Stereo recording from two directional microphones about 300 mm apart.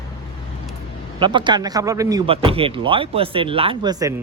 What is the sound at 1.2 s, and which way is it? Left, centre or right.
A man's voice, centre.